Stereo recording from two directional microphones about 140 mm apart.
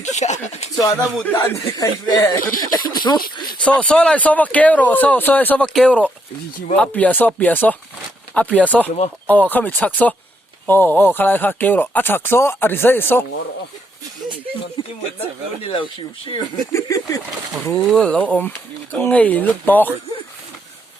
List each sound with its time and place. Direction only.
0.0 s speech: 55° left (ahead or behind)
0.8 s speech: 25° left (ahead or behind)
3.6 s speech: 10° left (ahead or behind)
14.8 s speech: 35° left (ahead or behind)
16.7 s speech: 25° left (ahead or behind)
17.7 s speech: 5° left (ahead or behind)